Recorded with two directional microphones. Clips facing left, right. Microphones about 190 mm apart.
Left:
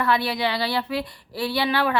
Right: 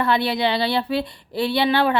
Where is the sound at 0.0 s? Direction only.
25° right (ahead or behind).